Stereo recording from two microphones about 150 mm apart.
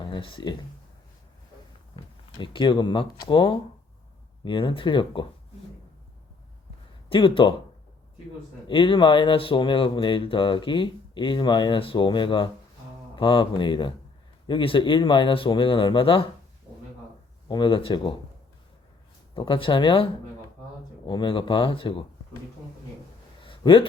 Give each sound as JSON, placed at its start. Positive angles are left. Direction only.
{"t": 0.0, "sound": "speech", "side_deg": 35}
{"t": 2.4, "sound": "speech", "side_deg": 30}
{"t": 7.1, "sound": "speech", "side_deg": 35}
{"t": 8.6, "sound": "speech", "side_deg": 35}
{"t": 17.5, "sound": "speech", "side_deg": 35}
{"t": 19.3, "sound": "speech", "side_deg": 35}
{"t": 21.1, "sound": "speech", "side_deg": 35}
{"t": 23.4, "sound": "a sound", "side_deg": 35}